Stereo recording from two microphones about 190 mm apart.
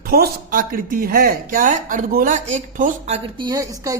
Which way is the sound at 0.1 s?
50° right (ahead or behind).